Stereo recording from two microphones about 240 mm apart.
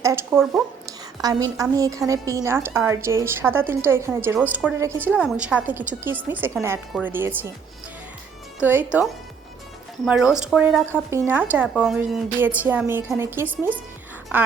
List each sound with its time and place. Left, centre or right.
0.0 s speech: centre
0.9 s a sound: centre
1.7 s a woman's voice: centre
8.5 s a woman's voice: centre